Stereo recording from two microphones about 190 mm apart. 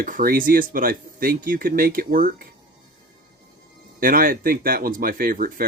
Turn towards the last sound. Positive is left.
turn(degrees=-50)  # may be behind; listen again after turning